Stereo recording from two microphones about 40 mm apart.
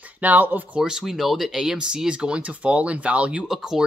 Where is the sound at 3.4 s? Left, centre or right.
Centre.